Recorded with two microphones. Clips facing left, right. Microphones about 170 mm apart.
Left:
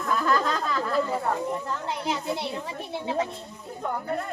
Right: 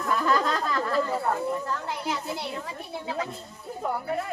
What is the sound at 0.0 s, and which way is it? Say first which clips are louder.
Speech: even; centre (ahead or behind).